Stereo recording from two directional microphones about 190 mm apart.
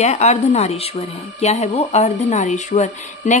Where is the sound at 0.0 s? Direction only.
35° left (ahead or behind).